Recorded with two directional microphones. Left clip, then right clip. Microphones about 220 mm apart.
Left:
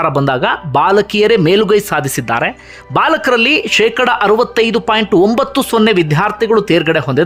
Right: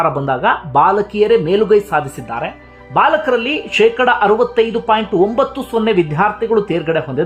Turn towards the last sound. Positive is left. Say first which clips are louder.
# left 5 dB
turn(degrees=20)  # may be behind; listen again after turning